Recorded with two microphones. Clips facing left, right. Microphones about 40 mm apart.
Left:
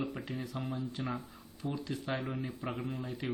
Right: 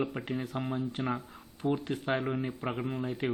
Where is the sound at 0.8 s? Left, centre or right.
Right.